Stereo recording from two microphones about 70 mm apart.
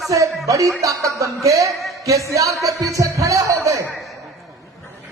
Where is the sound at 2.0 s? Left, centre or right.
Right.